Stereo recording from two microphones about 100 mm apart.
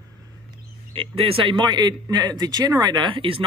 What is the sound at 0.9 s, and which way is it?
A man's voice, 75° right (ahead or behind).